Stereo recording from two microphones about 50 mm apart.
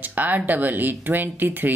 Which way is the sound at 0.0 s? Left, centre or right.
Right.